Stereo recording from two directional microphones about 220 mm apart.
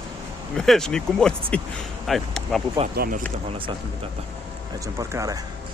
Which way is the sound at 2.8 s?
30° right (ahead or behind).